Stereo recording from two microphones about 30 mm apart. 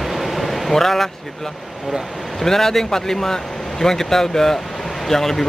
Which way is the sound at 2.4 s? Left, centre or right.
Centre.